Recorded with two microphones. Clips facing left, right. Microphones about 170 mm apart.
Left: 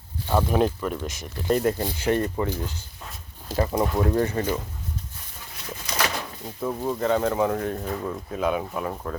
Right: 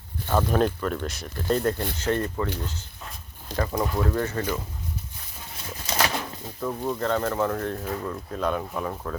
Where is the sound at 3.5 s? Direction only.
25° left (ahead or behind).